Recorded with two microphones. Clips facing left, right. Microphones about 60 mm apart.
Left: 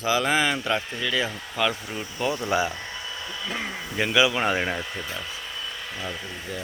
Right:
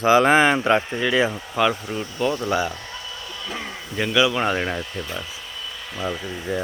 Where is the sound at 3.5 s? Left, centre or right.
Centre.